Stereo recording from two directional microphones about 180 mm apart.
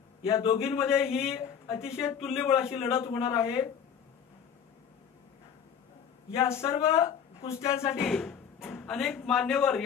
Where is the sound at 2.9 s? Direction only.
30° left (ahead or behind).